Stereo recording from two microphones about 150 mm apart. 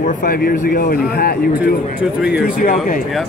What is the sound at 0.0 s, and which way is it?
Speech, 75° left (ahead or behind).